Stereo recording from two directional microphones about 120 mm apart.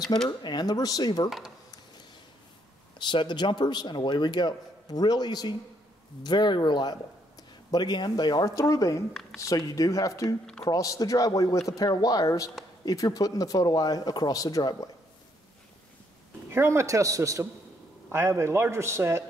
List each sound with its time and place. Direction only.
0.4 s a man's voice: 35° left (ahead or behind)
3.0 s a man's voice: 40° left (ahead or behind)
16.4 s a man's voice: 20° right (ahead or behind)